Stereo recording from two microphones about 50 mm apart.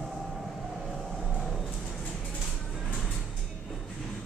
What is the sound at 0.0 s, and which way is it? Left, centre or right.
Train, centre.